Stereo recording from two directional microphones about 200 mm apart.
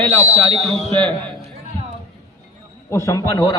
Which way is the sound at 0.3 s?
35° right (ahead or behind).